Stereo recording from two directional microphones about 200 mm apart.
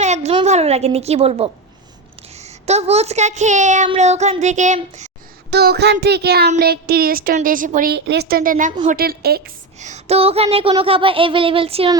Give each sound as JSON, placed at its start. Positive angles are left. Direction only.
{"t": 0.0, "sound": "a woman's voice", "side_deg": -35}
{"t": 5.5, "sound": "child singing", "side_deg": -55}
{"t": 6.6, "sound": "a woman's voice", "side_deg": -50}
{"t": 9.8, "sound": "a sound", "side_deg": -35}